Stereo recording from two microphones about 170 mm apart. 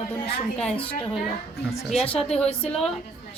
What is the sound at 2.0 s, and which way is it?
Speech, 5° left (ahead or behind).